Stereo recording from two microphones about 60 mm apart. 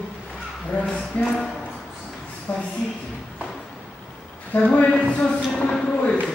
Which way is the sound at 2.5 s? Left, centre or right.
Left.